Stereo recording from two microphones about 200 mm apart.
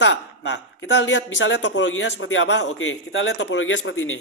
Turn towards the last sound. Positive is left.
turn(degrees=70)  # may be behind; listen again after turning